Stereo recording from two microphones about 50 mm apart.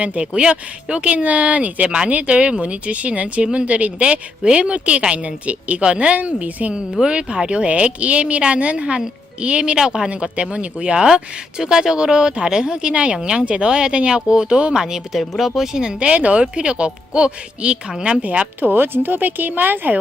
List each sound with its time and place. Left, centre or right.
0.0 s speech: right
15.2 s speech: centre
18.2 s speech: right
18.7 s speech: right